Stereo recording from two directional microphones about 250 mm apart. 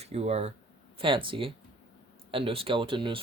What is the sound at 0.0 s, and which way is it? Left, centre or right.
Speech, right.